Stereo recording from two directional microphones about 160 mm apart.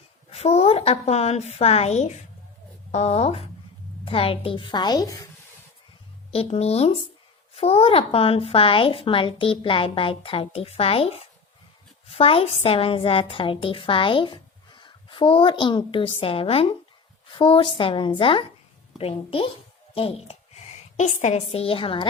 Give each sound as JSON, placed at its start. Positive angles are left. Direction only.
{"t": 0.3, "sound": "a woman's voice", "side_deg": 40}
{"t": 6.3, "sound": "a woman's voice", "side_deg": 40}
{"t": 20.9, "sound": "a woman's voice", "side_deg": 45}